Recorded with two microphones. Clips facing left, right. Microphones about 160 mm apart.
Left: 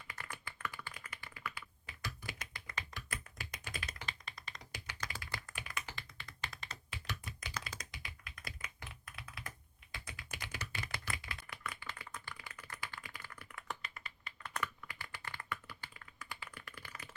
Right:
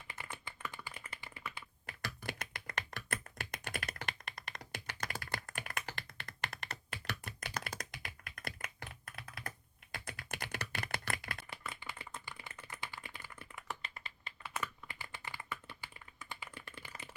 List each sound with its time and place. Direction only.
0.1 s computer keyboard: 25° right (ahead or behind)
0.9 s typing: 30° right (ahead or behind)
1.9 s computer keyboard: 60° right (ahead or behind)
3.3 s tap: 60° right (ahead or behind)
11.5 s a sound: 25° right (ahead or behind)
12.3 s typing: 25° right (ahead or behind)
13.1 s computer keyboard: 25° right (ahead or behind)
13.8 s typing: 30° right (ahead or behind)
16.1 s computer keyboard: 25° right (ahead or behind)